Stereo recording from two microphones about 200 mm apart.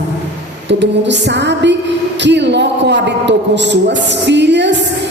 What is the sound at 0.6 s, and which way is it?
A woman's voice, 60° right (ahead or behind).